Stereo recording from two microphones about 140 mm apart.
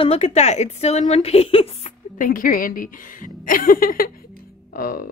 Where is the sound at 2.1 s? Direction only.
80° left.